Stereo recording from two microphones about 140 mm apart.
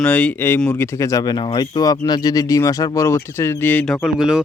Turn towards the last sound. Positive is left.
turn(degrees=-5)  # may be behind; listen again after turning